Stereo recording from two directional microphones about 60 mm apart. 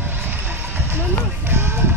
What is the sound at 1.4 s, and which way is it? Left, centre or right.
Music, right.